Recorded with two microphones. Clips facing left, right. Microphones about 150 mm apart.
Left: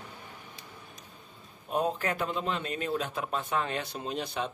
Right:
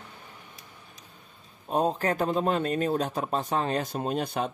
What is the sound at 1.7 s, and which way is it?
A man's voice, 35° right (ahead or behind).